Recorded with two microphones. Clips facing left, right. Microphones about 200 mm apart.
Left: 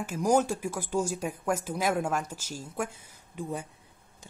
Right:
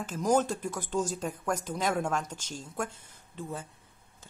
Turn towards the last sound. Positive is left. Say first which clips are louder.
# left 3 dB
turn(degrees=15)  # may be behind; listen again after turning